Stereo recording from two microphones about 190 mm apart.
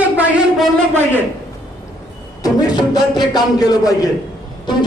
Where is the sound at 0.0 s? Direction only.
10° right (ahead or behind).